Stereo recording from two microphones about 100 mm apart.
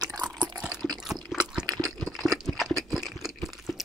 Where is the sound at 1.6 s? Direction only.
40° right (ahead or behind).